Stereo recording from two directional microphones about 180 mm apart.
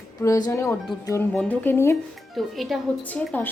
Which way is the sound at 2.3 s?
Centre (ahead or behind).